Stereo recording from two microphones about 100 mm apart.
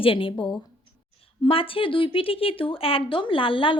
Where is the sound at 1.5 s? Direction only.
65° left (ahead or behind).